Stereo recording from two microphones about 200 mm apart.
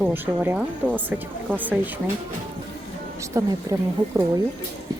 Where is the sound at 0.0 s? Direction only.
10° right (ahead or behind).